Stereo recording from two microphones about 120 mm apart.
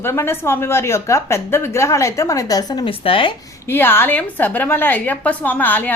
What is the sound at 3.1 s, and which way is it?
Speech, 45° left (ahead or behind).